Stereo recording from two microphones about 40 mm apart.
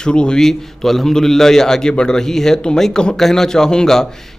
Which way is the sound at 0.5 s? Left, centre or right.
Centre.